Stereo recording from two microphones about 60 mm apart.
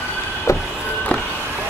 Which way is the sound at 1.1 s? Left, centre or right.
Left.